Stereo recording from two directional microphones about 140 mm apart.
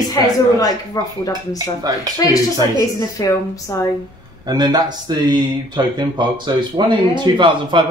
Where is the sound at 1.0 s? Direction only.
25° left (ahead or behind).